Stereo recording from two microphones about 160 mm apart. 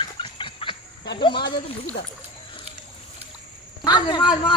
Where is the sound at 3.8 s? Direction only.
25° left (ahead or behind).